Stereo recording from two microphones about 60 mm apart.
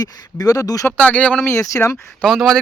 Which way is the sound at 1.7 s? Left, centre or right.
Left.